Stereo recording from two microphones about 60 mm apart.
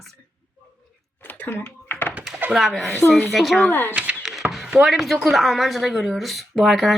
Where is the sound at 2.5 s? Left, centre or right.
Centre.